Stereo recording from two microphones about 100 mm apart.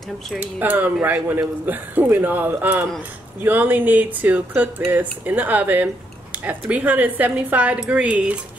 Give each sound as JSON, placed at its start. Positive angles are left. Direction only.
{"t": 0.4, "sound": "speech", "side_deg": -20}
{"t": 1.1, "sound": "a man's voice", "side_deg": -30}
{"t": 1.7, "sound": "speech", "side_deg": -20}